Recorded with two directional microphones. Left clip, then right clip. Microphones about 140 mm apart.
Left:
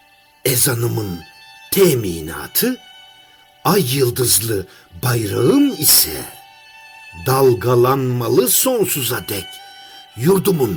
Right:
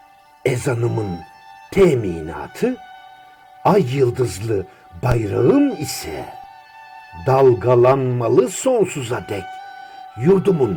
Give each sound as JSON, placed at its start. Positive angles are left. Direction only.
{"t": 0.4, "sound": "music", "side_deg": 80}
{"t": 3.7, "sound": "speech", "side_deg": 75}
{"t": 7.3, "sound": "speech", "side_deg": 75}
{"t": 9.6, "sound": "music", "side_deg": 40}
{"t": 10.2, "sound": "speech", "side_deg": 90}